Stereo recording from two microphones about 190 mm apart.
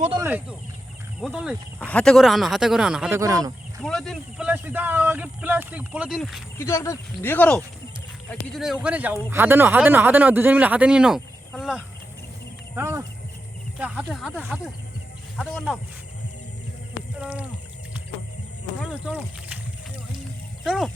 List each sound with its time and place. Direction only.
0.2 s speech: 10° right (ahead or behind)
1.8 s speech: 5° left (ahead or behind)
3.2 s speech: 20° right (ahead or behind)
3.8 s speech: centre (ahead or behind)
6.6 s speech: 15° left (ahead or behind); by 11.9 s 5° right (ahead or behind)
12.7 s speech: 15° right (ahead or behind); by 15.8 s centre (ahead or behind)
17.2 s speech: 5° right (ahead or behind)
18.8 s speech: 5° right (ahead or behind)
20.7 s speech: centre (ahead or behind)